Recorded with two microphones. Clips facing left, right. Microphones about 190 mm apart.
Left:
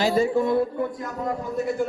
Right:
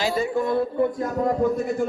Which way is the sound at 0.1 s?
35° left (ahead or behind).